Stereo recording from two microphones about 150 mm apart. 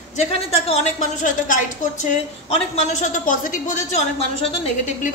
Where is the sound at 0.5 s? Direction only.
45° left (ahead or behind).